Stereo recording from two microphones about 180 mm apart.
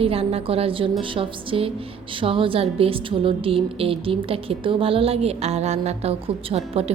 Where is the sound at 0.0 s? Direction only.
30° right (ahead or behind).